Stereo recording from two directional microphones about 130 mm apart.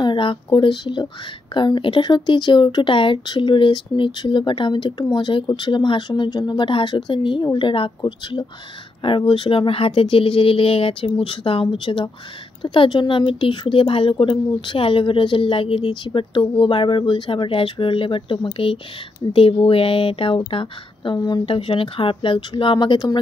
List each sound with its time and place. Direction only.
0.0 s speech: 40° left (ahead or behind)